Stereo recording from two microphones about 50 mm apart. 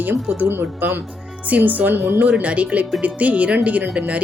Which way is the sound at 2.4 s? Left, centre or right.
Right.